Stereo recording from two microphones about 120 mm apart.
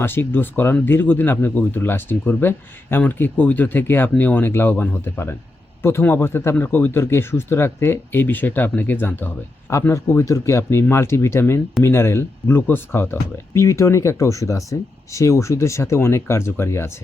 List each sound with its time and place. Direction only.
0.0 s speech: 20° left (ahead or behind)